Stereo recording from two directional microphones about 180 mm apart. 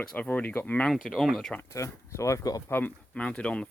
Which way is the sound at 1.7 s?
15° left (ahead or behind).